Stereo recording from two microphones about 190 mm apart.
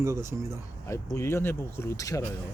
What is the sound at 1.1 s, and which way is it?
A man's voice, 15° left (ahead or behind).